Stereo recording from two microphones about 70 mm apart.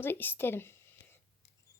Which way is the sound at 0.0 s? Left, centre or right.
Left.